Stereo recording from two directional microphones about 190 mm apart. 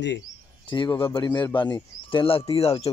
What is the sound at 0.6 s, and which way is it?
Speech, 20° left (ahead or behind).